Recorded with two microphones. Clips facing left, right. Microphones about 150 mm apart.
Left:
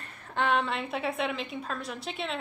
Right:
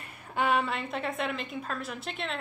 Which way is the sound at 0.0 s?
10° right (ahead or behind).